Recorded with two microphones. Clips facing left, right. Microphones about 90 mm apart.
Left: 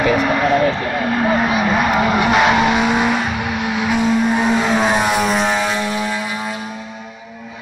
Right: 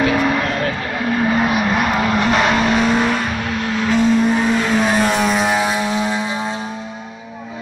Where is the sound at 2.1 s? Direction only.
10° left (ahead or behind); by 6.5 s 25° right (ahead or behind).